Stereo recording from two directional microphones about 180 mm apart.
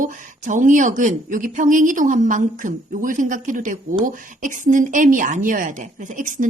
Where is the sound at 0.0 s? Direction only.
45° right (ahead or behind).